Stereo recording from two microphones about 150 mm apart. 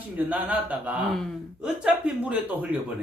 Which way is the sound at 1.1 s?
Centre (ahead or behind).